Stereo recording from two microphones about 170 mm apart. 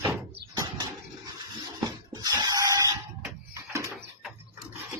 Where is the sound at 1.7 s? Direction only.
25° right (ahead or behind).